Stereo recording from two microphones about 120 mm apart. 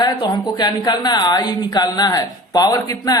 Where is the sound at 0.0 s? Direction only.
35° left (ahead or behind).